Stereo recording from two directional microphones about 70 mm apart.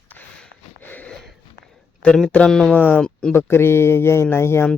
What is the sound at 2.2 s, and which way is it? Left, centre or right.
Speech, centre.